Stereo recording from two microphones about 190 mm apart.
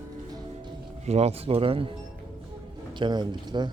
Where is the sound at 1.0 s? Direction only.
35° right (ahead or behind).